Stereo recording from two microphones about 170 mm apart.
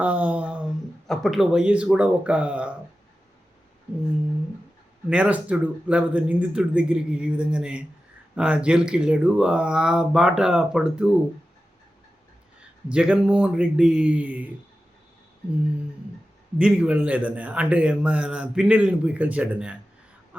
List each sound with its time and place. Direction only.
0.0 s a sound: 10° right (ahead or behind)
5.0 s a man's voice: 5° right (ahead or behind)
12.9 s a man's voice: 5° right (ahead or behind)
16.6 s a man's voice: 5° right (ahead or behind)